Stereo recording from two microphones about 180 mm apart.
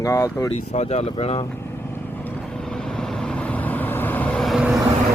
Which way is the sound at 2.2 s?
5° left (ahead or behind).